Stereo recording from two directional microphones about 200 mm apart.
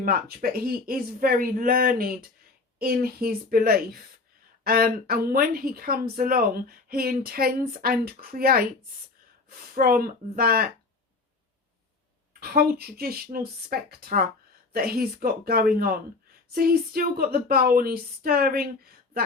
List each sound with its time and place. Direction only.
0.0 s speech: 50° right (ahead or behind)
12.4 s speech: 50° right (ahead or behind)